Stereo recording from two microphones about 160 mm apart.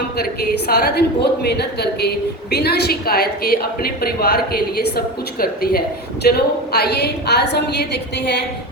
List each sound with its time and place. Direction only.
0.7 s a woman's voice: 80° left
2.6 s a woman's voice: 80° left
6.7 s a woman's voice: 90° left